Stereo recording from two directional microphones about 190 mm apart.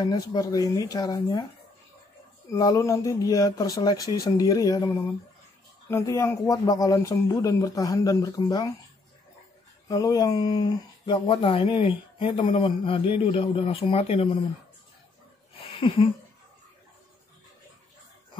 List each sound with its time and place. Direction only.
0.0 s speech: 20° left (ahead or behind)
2.5 s speech: 15° left (ahead or behind)
9.8 s speech: 20° left (ahead or behind)
15.6 s a sound: 25° left (ahead or behind)